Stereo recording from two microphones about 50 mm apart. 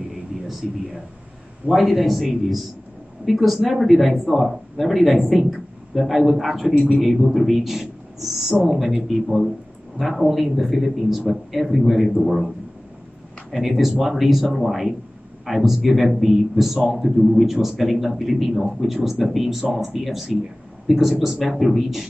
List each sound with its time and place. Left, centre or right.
0.6 s speech: centre
6.8 s speech: centre
7.1 s a man's voice: centre